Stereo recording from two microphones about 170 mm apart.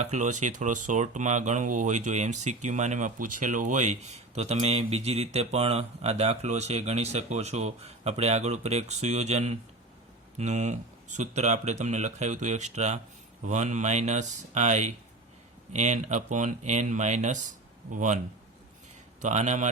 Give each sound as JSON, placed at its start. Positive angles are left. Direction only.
{"t": 0.0, "sound": "speech", "side_deg": -45}
{"t": 19.2, "sound": "speech", "side_deg": -45}